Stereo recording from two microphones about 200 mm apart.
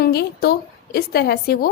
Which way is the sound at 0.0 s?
50° left (ahead or behind).